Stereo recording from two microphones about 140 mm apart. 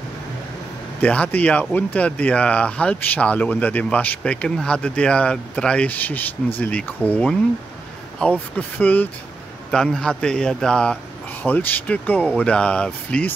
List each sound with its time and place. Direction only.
1.0 s a man's voice: 10° left (ahead or behind)